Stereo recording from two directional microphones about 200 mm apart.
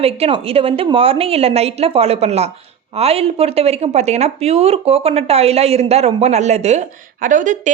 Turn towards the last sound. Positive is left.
turn(degrees=-40)  # may be behind; listen again after turning